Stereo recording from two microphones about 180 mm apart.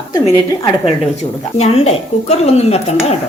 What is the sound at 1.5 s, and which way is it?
Speech, 35° left (ahead or behind).